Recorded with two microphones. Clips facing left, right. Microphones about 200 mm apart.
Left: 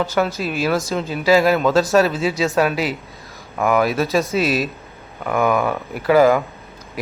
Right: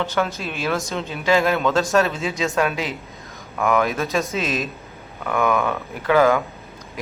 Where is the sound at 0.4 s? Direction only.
5° left (ahead or behind).